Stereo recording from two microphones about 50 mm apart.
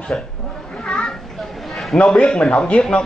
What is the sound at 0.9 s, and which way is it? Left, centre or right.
Children playing, centre.